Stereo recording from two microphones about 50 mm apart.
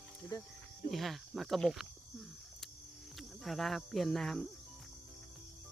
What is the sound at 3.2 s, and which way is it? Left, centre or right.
Cricket, centre.